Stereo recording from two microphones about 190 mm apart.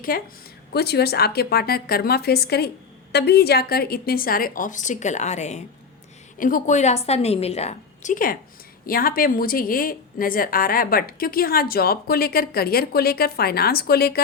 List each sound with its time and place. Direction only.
0.1 s a woman's voice: 50° left (ahead or behind)